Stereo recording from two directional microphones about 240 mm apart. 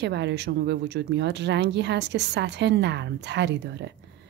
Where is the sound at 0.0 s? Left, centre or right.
Right.